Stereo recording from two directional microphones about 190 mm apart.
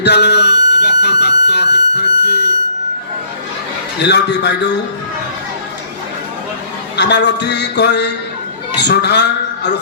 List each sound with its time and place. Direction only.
0.0 s speech: 65° left (ahead or behind)
3.9 s speech: 65° left (ahead or behind)
6.9 s a man's voice: 60° left (ahead or behind)